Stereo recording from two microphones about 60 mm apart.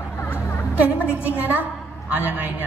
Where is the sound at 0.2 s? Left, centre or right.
Left.